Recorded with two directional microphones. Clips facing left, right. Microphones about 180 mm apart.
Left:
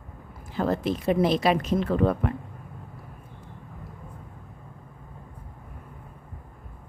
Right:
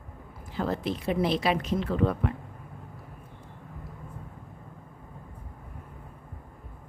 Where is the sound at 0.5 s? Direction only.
50° left (ahead or behind).